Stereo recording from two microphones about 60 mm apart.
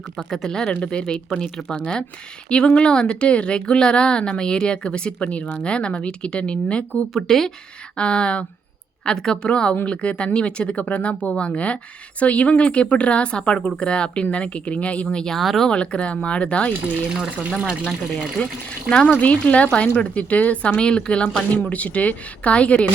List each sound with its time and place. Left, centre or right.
0.2 s speech: centre
7.1 s speech: centre
7.9 s speech: centre
15.7 s speech: centre
17.1 s speech: centre
18.4 s speech: left